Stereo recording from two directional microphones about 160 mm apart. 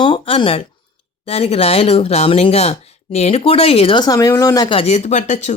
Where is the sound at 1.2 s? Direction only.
40° left (ahead or behind).